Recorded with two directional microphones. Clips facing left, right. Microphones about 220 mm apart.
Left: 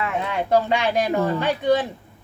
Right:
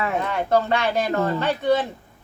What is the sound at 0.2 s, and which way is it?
Speech, 15° left (ahead or behind).